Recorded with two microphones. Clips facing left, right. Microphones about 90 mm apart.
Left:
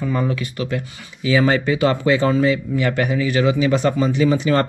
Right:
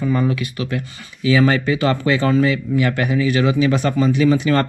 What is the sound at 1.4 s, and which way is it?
Speech, 25° left (ahead or behind).